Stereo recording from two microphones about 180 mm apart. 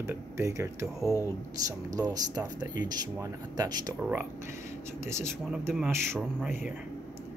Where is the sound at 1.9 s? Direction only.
20° right (ahead or behind).